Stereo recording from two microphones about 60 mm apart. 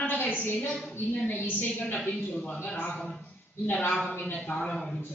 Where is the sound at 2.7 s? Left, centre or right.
Left.